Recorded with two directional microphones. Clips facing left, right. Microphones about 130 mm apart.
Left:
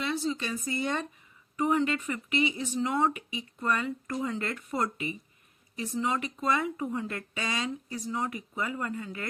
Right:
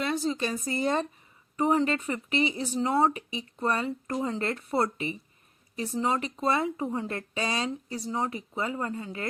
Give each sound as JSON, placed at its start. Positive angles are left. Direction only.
{"t": 0.0, "sound": "speech", "side_deg": -45}